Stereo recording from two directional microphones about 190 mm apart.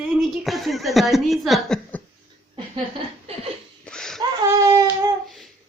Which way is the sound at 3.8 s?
5° left (ahead or behind).